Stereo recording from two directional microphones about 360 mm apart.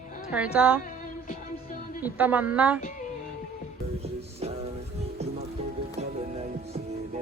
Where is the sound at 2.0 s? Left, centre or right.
Centre.